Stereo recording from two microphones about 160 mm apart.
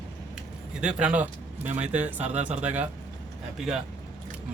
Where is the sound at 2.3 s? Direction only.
45° right (ahead or behind).